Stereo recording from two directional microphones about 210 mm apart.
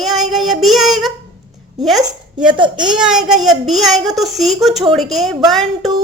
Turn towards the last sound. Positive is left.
turn(degrees=0)  # may be behind; listen again after turning